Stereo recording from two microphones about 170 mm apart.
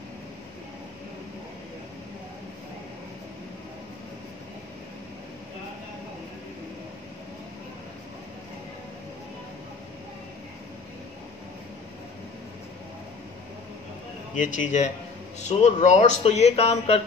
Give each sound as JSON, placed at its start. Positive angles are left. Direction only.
{"t": 14.3, "sound": "speech", "side_deg": 50}